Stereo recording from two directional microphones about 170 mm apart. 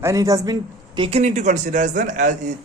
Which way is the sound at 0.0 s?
20° right (ahead or behind).